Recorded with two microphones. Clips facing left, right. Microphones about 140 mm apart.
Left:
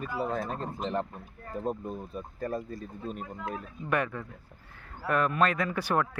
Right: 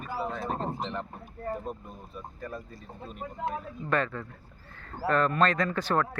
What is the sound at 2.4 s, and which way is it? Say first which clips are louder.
Speech: left 8 dB; 40° left (ahead or behind).